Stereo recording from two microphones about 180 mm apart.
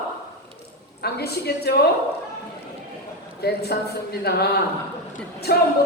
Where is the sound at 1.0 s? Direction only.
60° left (ahead or behind).